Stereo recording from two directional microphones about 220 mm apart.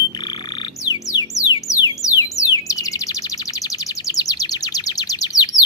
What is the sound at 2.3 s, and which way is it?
Bird, 15° left (ahead or behind).